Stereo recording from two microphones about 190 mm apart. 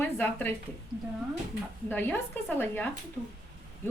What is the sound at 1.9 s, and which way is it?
Speech, 10° left (ahead or behind).